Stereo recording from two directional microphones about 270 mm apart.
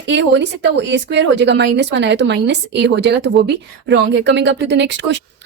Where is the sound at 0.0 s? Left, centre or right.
Right.